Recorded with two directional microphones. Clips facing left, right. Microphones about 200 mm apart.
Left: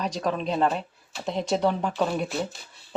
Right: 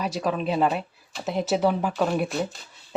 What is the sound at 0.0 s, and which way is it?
Speech, 5° right (ahead or behind).